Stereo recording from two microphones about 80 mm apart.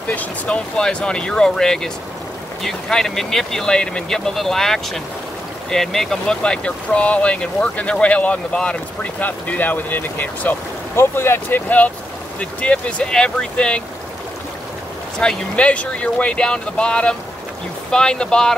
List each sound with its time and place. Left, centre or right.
0.1 s speech: centre
12.4 s speech: centre
15.1 s speech: centre